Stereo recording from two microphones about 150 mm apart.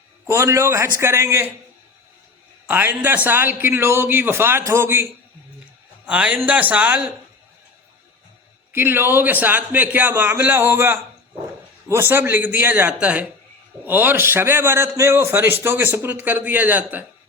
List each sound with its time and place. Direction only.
0.3 s a man's voice: 20° right (ahead or behind)
2.6 s a man's voice: 10° right (ahead or behind)
6.1 s a man's voice: 10° right (ahead or behind)
8.7 s a man's voice: 15° right (ahead or behind)